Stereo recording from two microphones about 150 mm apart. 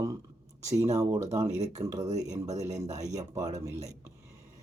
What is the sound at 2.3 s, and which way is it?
Speech, 50° right (ahead or behind).